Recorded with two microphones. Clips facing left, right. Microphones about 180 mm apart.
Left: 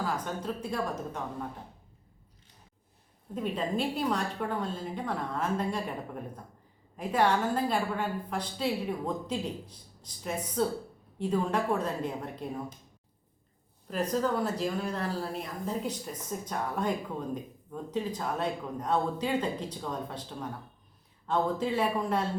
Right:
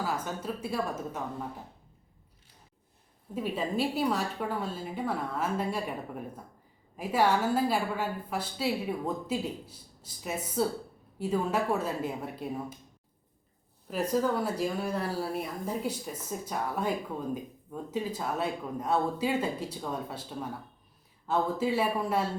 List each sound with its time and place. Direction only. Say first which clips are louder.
0.0 s speech: even; 5° right (ahead or behind)
3.3 s speech: even; 5° right (ahead or behind)
13.8 s speech: right 1 dB; 5° right (ahead or behind)